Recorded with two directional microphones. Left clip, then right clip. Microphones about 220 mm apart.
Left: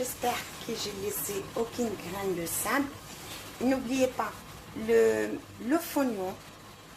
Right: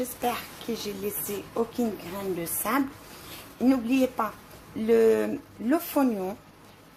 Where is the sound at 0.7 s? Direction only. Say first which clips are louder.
Right 3 dB; 45° right (ahead or behind).